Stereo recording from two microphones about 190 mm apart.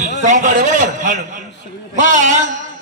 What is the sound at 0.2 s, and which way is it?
A man's voice, 40° right (ahead or behind).